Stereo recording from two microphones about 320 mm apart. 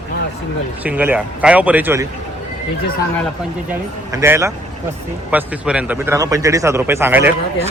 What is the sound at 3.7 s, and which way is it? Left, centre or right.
A man's voice, centre.